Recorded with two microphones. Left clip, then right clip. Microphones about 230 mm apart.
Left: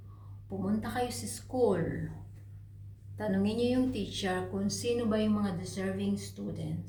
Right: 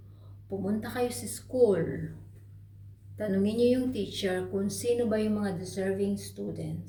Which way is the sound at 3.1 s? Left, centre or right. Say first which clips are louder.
Right 4 dB; centre.